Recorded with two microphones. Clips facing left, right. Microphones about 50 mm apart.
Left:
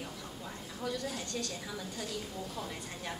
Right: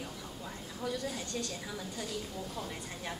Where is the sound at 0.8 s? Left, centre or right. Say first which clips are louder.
Even; centre.